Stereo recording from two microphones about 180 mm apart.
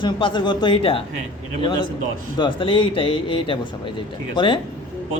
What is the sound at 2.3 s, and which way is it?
Speech, 30° left (ahead or behind).